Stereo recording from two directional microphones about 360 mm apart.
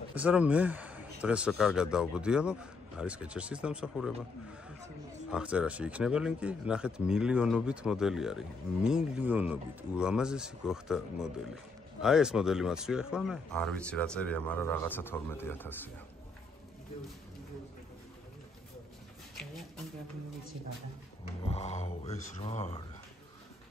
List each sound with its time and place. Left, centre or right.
0.1 s speech: centre
5.3 s speech: centre
21.5 s speech: centre